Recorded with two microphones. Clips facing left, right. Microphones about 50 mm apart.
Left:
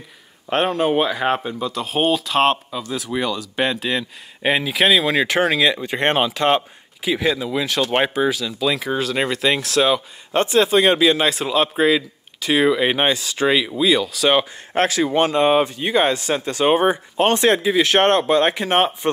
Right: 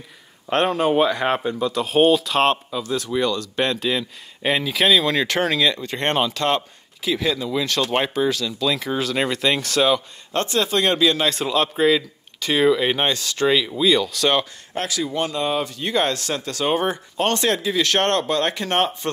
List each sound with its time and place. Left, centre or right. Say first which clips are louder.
0.5 s speech: even; centre
14.7 s speech: left 9 dB; left
15.8 s speech: left 3 dB; centre